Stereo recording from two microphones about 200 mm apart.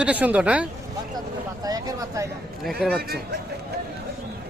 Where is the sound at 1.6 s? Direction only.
20° right (ahead or behind).